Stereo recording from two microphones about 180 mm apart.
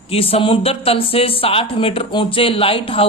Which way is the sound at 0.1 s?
30° left (ahead or behind).